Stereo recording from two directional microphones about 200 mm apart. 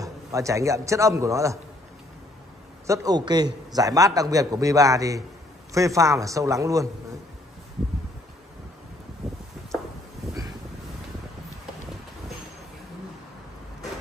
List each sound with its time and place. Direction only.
0.0 s a man's voice: 15° right (ahead or behind)
2.9 s a man's voice: 15° right (ahead or behind)